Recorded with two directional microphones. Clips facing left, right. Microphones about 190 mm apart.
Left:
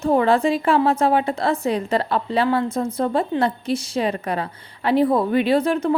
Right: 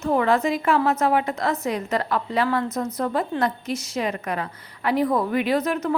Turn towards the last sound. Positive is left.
turn(degrees=30)  # may be behind; listen again after turning